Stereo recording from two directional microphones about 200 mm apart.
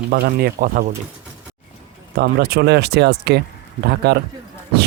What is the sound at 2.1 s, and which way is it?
Speech, 50° right (ahead or behind).